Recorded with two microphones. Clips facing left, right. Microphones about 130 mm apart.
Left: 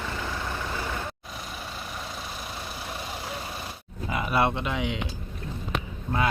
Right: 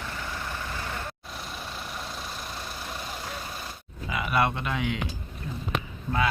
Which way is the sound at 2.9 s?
10° left (ahead or behind).